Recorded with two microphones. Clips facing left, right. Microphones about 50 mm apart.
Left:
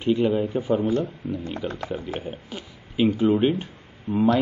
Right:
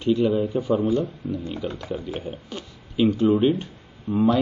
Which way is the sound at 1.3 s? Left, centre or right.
Centre.